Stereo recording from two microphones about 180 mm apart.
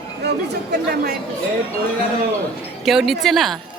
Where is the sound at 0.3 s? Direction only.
65° right (ahead or behind).